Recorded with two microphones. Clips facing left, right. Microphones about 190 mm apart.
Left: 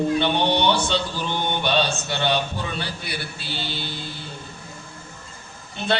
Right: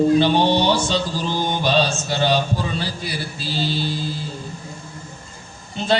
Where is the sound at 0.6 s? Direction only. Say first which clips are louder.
Right 2 dB; 60° left (ahead or behind).